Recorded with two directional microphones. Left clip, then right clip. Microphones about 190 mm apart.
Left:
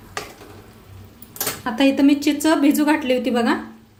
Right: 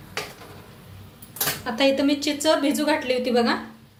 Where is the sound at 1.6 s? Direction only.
50° left (ahead or behind).